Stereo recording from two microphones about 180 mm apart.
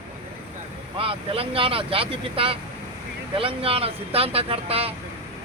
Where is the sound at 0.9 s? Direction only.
30° right (ahead or behind).